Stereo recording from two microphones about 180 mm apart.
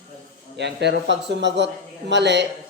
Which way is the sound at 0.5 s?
70° right (ahead or behind).